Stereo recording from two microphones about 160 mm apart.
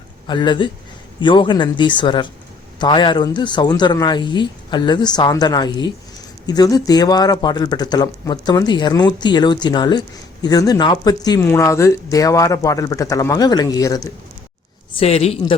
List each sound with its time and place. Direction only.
0.3 s speech: 30° left (ahead or behind)
14.9 s a woman's voice: 40° left (ahead or behind)